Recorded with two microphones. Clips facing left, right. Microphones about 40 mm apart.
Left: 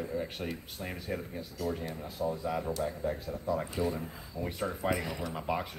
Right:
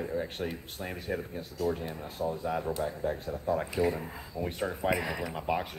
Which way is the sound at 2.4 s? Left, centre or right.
Right.